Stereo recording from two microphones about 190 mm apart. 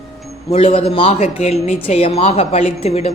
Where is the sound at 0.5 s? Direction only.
30° left (ahead or behind).